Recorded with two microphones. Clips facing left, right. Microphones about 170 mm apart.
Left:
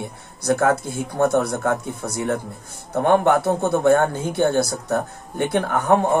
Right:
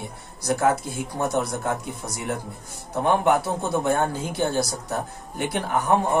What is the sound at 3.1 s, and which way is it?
Speech, 55° left (ahead or behind).